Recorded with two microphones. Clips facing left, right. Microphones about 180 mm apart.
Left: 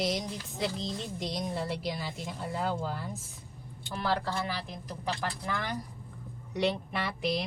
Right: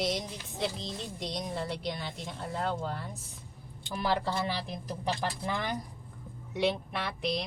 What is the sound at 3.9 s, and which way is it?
Speech, 15° right (ahead or behind).